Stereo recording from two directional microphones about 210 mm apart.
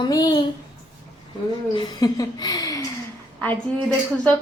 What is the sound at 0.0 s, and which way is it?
Speech, 15° left (ahead or behind).